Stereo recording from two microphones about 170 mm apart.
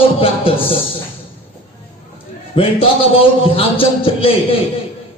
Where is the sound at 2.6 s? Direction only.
30° left (ahead or behind).